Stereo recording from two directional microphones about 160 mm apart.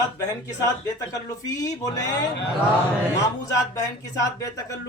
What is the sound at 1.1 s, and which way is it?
Speech, 20° left (ahead or behind).